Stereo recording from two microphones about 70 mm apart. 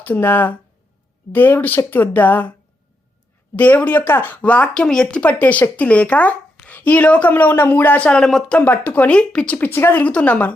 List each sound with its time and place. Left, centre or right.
0.0 s speech: left
8.0 s speech: centre
8.5 s speech: left
9.7 s speech: left
10.0 s speech: centre